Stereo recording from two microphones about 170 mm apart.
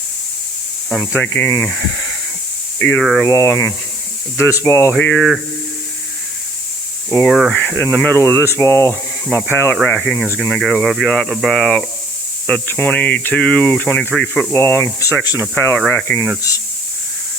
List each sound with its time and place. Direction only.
1.0 s speech: 15° left (ahead or behind)
3.2 s speech: 20° left (ahead or behind)
7.3 s speech: centre (ahead or behind)